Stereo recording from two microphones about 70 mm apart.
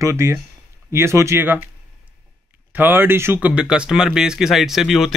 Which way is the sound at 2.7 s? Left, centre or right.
Right.